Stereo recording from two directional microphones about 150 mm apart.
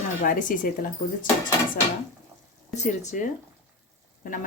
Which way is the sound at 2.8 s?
55° left (ahead or behind).